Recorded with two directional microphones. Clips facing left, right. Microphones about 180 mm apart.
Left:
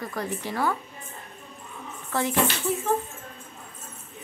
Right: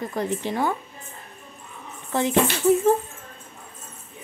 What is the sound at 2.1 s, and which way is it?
Speech, 20° right (ahead or behind).